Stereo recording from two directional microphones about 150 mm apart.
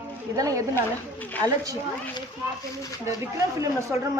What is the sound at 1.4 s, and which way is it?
Speech, 25° right (ahead or behind).